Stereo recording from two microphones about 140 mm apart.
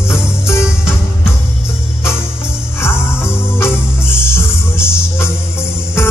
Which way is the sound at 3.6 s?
15° left (ahead or behind).